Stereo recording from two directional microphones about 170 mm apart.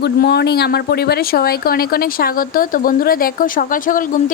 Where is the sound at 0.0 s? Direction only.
70° left (ahead or behind).